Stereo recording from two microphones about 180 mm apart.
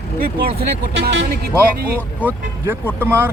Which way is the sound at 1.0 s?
65° right (ahead or behind).